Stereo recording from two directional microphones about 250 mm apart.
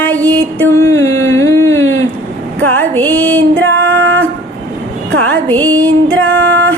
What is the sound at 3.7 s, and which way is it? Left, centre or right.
Music, centre.